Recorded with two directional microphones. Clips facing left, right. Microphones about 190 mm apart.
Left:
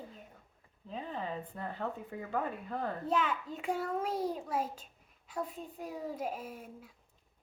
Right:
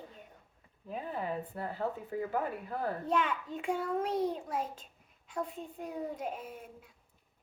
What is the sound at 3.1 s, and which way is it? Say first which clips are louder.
A child's voice: even; 5° left (ahead or behind).